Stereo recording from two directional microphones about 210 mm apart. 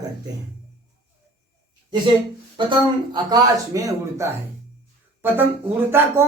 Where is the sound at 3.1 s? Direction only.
15° right (ahead or behind).